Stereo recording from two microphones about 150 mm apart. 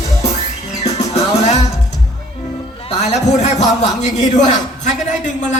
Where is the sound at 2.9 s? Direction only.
45° left (ahead or behind).